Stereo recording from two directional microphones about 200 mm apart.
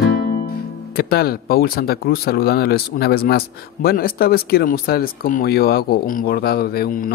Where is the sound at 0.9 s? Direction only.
50° left (ahead or behind).